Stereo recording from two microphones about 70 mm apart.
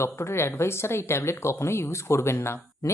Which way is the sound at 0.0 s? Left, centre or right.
Left.